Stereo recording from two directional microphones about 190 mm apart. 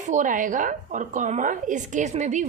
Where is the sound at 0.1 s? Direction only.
45° right (ahead or behind).